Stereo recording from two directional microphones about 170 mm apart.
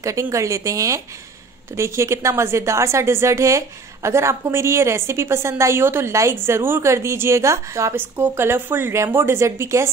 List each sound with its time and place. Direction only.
0.0 s a woman's voice: 20° right (ahead or behind)